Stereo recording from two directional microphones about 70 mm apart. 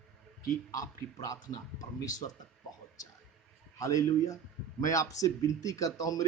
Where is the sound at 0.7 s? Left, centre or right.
Left.